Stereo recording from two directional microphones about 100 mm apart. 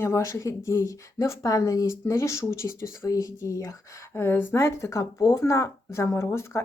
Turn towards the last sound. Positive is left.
turn(degrees=25)  # may be behind; listen again after turning